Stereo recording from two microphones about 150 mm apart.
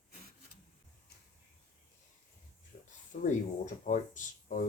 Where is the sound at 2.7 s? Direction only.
50° left (ahead or behind).